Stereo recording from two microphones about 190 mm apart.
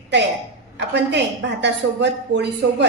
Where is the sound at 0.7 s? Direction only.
65° right (ahead or behind).